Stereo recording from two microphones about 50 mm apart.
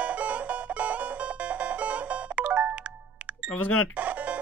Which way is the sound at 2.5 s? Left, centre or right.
Right.